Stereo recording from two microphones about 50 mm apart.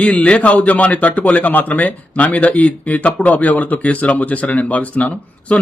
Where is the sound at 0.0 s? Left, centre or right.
Left.